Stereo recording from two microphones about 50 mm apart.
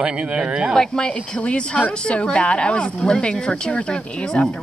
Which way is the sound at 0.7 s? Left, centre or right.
Centre.